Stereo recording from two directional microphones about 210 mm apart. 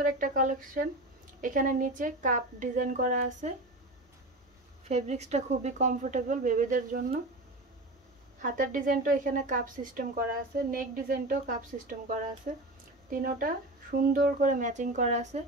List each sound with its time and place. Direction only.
0.0 s a woman's voice: 40° right (ahead or behind)
4.8 s a woman's voice: 30° right (ahead or behind)
8.4 s a woman's voice: 40° right (ahead or behind)